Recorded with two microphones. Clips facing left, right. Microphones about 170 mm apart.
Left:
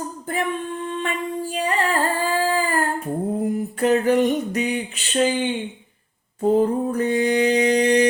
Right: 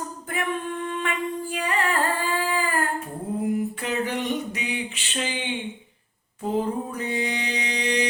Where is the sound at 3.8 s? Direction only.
45° left (ahead or behind).